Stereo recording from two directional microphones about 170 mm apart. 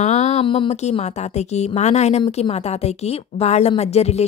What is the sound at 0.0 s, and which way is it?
A woman's voice, 45° left (ahead or behind).